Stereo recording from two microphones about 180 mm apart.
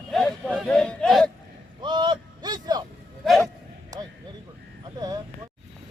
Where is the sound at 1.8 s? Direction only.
25° right (ahead or behind).